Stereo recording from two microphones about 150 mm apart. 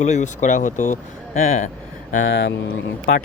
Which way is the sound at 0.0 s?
50° left (ahead or behind).